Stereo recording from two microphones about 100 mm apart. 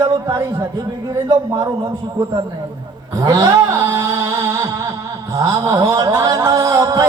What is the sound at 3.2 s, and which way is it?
Music, 40° right (ahead or behind).